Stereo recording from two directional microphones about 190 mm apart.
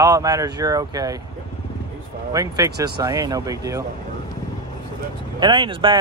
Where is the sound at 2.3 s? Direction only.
20° right (ahead or behind).